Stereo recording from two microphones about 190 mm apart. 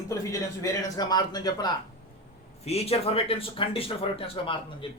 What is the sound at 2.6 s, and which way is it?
Speech, 35° left (ahead or behind).